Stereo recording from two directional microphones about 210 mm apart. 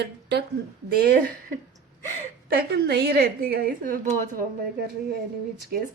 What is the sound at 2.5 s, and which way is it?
Speech, 50° right (ahead or behind).